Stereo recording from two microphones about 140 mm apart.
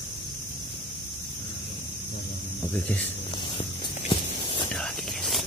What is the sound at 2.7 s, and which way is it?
Speech, 10° left (ahead or behind).